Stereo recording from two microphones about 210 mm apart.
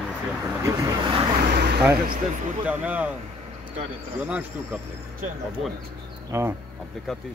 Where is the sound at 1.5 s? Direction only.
50° right (ahead or behind).